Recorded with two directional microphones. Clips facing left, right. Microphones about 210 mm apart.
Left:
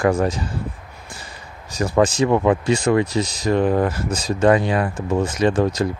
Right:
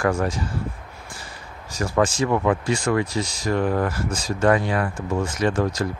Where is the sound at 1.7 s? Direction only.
20° left (ahead or behind).